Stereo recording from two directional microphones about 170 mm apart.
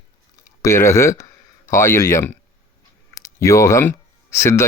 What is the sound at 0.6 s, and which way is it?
Speech, 15° left (ahead or behind).